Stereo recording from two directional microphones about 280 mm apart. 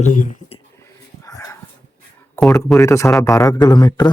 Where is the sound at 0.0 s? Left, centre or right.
Left.